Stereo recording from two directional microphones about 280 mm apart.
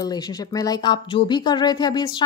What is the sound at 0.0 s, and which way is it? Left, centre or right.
Speech, centre.